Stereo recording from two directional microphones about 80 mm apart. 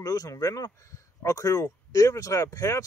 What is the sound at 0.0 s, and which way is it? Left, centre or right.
Speech, left.